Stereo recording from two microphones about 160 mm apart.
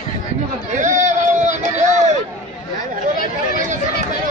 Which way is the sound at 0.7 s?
50° right (ahead or behind).